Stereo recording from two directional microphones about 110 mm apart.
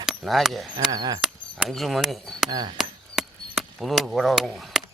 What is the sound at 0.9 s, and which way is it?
Speech, 40° right (ahead or behind).